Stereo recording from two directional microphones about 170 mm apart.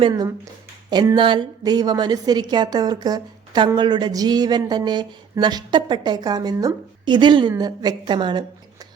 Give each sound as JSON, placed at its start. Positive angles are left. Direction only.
{"t": 0.0, "sound": "a woman's voice", "side_deg": -25}